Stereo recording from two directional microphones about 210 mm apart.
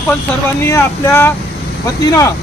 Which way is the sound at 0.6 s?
10° left (ahead or behind).